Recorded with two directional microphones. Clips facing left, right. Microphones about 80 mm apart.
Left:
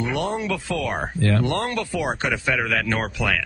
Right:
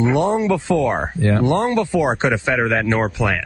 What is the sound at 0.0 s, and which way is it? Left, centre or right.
A man's voice, right.